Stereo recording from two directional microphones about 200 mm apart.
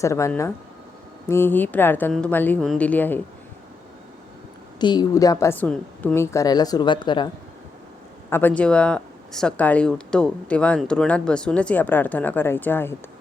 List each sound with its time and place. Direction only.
0.0 s speech: 15° left (ahead or behind)
4.8 s speech: 20° left (ahead or behind)
8.3 s speech: 10° left (ahead or behind)